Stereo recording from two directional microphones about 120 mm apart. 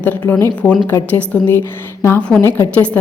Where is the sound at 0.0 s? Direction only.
15° left (ahead or behind).